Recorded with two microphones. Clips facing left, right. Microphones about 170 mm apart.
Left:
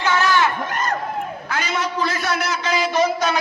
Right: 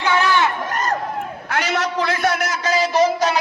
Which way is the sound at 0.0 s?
20° right (ahead or behind).